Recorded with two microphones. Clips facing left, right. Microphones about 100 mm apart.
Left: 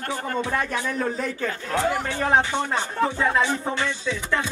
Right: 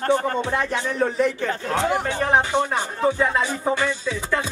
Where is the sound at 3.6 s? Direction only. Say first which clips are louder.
Right 4 dB; 15° right (ahead or behind).